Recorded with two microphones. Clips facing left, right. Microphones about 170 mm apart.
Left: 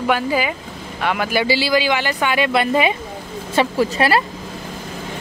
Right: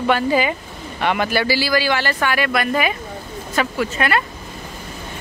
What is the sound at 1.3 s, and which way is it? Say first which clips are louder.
Speech: left 1 dB; 20° left (ahead or behind).